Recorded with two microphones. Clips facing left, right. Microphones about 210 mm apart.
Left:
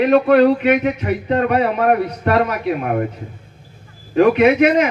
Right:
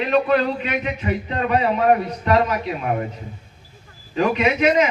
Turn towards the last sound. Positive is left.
turn(degrees=60)  # may be behind; listen again after turning